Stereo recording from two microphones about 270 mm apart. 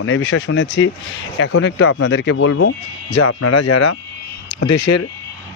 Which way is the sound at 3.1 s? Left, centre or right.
Left.